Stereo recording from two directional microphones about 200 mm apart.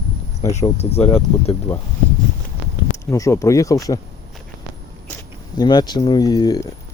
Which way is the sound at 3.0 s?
15° left (ahead or behind).